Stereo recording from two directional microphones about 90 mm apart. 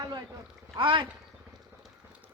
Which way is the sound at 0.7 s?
70° right (ahead or behind).